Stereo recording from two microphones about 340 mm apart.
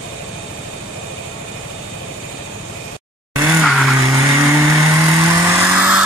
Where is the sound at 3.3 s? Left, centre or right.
Centre.